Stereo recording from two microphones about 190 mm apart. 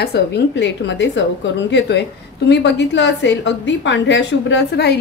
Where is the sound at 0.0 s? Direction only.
65° left (ahead or behind).